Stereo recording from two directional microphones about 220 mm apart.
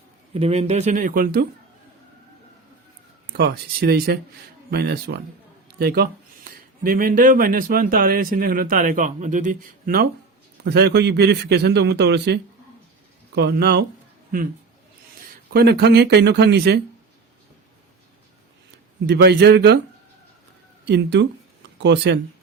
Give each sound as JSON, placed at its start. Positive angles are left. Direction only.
{"t": 0.3, "sound": "speech", "side_deg": -25}
{"t": 3.3, "sound": "a man's voice", "side_deg": -45}
{"t": 15.5, "sound": "a man's voice", "side_deg": -45}
{"t": 19.0, "sound": "a man's voice", "side_deg": -50}
{"t": 20.8, "sound": "a man's voice", "side_deg": -50}